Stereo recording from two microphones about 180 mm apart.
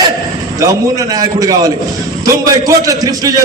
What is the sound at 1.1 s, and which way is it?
A man's voice, 20° right (ahead or behind).